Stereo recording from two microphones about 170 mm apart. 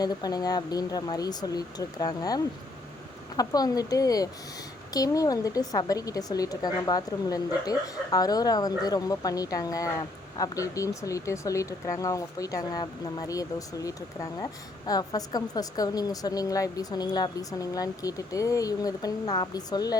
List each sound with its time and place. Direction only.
0.0 s speech: 25° left (ahead or behind)